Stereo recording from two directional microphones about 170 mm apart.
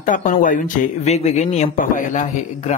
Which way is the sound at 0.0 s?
50° left (ahead or behind).